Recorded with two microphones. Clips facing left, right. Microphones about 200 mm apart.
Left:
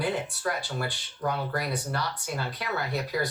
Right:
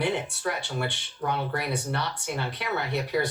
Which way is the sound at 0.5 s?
25° right (ahead or behind).